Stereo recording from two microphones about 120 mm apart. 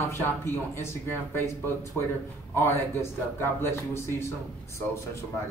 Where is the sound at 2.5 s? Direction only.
20° left (ahead or behind).